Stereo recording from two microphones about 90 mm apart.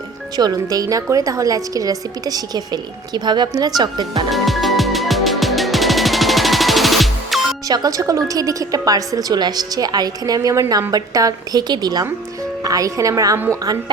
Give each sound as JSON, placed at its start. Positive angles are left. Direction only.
{"t": 0.3, "sound": "a woman's voice", "side_deg": -45}
{"t": 4.3, "sound": "music", "side_deg": 0}
{"t": 7.7, "sound": "a woman's voice", "side_deg": -45}